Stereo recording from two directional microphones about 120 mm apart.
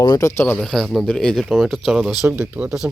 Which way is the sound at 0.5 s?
Centre (ahead or behind).